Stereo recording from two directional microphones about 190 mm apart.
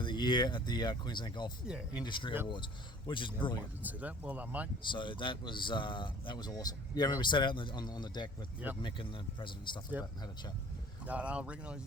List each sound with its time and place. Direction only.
0.0 s speech: 25° left (ahead or behind)
1.6 s speech: 5° right (ahead or behind)
2.0 s speech: 25° left (ahead or behind)
3.8 s speech: 10° right (ahead or behind)
4.8 s speech: 25° left (ahead or behind)
11.0 s speech: 5° right (ahead or behind)